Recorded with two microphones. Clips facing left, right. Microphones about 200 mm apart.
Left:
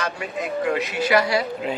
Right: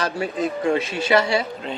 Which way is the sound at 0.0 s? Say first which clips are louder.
Right 4 dB; 30° right (ahead or behind).